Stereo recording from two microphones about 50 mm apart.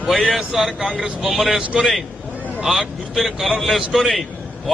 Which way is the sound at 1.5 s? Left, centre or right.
Centre.